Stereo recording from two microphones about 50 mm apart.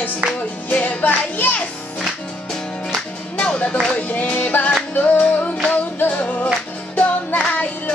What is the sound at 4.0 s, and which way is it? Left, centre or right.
Music, left.